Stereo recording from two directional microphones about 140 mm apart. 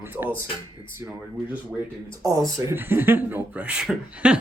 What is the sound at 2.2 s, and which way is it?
A man's voice, 25° right (ahead or behind).